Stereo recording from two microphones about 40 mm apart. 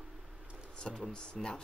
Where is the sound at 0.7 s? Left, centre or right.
Left.